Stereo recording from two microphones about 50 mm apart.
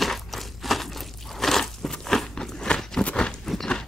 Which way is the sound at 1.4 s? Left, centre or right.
Centre.